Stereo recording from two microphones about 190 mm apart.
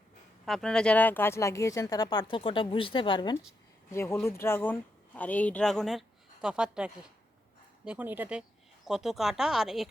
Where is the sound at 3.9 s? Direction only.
15° left (ahead or behind).